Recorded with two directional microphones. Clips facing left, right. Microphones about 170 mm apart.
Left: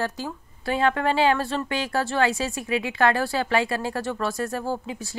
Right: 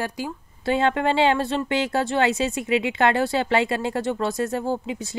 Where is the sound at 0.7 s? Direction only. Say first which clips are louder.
Right 1 dB; 25° right (ahead or behind).